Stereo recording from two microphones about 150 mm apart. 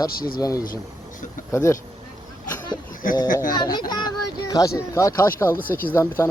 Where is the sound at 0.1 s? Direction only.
80° left.